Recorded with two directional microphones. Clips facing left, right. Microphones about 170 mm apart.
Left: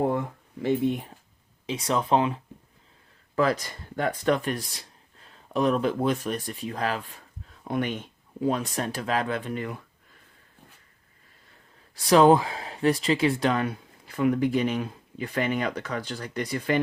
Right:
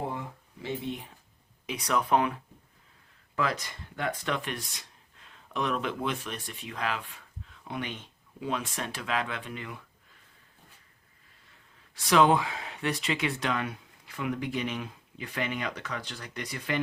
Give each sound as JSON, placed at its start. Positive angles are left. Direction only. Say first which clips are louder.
{"t": 0.1, "sound": "a sound", "louder": "left 9 dB", "side_deg": 55}
{"t": 1.6, "sound": "speech", "louder": "left 3 dB", "side_deg": 25}
{"t": 11.9, "sound": "speech", "louder": "left 5 dB", "side_deg": 35}